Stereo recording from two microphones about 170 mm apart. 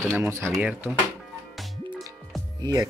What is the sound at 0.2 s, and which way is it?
Speech, 15° right (ahead or behind).